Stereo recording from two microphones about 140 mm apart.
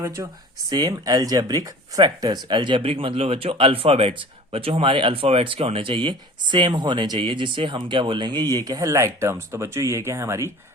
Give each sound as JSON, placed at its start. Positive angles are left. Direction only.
{"t": 0.2, "sound": "speech", "side_deg": -25}